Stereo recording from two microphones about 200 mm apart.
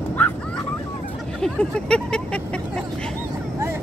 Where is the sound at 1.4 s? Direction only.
5° left (ahead or behind).